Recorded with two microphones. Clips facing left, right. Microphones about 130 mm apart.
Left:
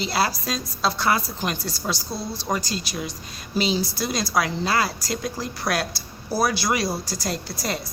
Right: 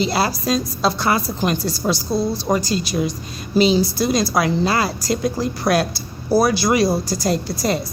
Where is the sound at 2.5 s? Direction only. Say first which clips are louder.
Right 6 dB; 35° right (ahead or behind).